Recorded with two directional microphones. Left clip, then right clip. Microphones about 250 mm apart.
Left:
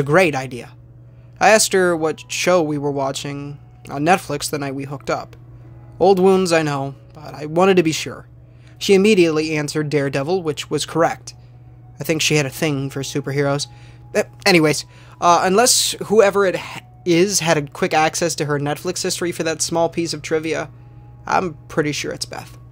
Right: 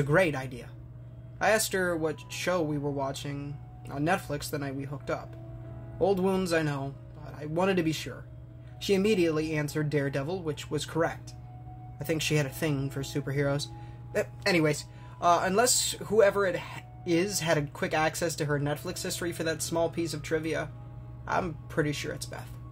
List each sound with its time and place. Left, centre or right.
0.0 s speech: left